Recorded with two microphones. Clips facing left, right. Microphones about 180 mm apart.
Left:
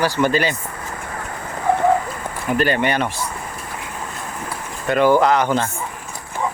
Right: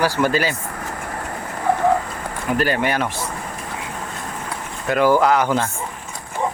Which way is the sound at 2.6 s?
5° right (ahead or behind).